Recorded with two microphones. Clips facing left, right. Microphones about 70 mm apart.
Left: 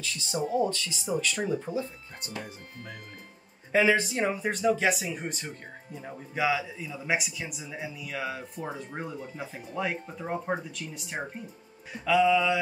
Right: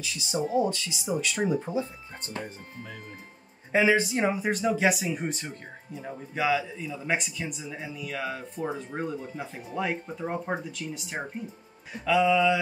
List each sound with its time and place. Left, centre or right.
0.0 s speech: centre
3.7 s a man's voice: centre